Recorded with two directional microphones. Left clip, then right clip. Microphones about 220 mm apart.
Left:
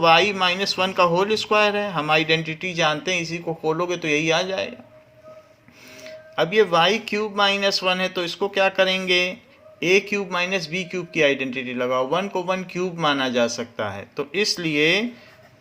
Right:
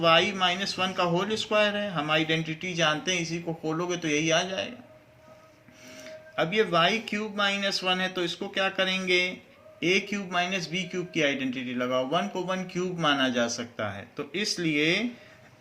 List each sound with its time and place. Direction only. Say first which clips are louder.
0.0 s a man's voice: left 6 dB; 45° left (ahead or behind)
6.0 s a man's voice: left 6 dB; 40° left (ahead or behind)